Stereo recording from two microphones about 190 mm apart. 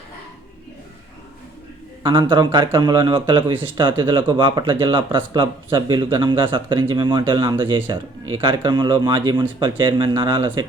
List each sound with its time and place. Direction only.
2.0 s speech: 25° right (ahead or behind)